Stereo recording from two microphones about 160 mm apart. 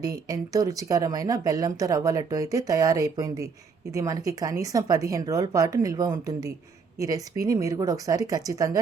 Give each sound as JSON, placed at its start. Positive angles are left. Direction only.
{"t": 0.3, "sound": "speech", "side_deg": -20}